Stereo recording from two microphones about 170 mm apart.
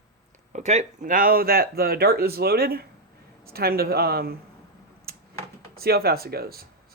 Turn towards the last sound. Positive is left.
turn(degrees=-65)  # may be behind; listen again after turning